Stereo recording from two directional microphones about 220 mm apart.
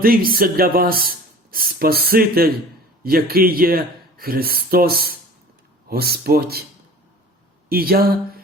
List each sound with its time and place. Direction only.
0.0 s speech: 40° right (ahead or behind)
7.7 s speech: 45° right (ahead or behind)